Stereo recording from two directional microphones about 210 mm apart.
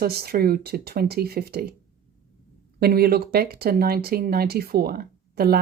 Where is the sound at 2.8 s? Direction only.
45° right (ahead or behind).